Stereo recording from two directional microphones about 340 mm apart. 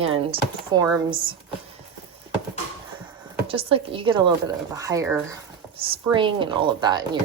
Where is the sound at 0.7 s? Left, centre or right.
Centre.